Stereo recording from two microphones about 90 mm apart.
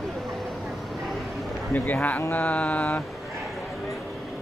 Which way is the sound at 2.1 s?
20° left (ahead or behind).